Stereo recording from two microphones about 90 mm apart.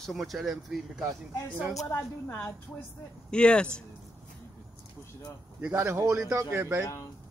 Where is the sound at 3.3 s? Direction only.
10° left (ahead or behind).